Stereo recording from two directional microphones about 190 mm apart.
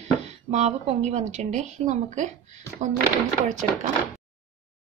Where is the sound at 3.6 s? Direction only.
40° right (ahead or behind).